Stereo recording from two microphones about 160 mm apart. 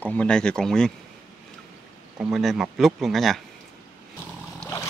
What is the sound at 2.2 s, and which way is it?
Speech, centre (ahead or behind).